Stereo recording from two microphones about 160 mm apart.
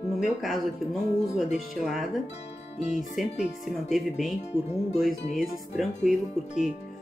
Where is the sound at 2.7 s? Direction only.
50° left (ahead or behind).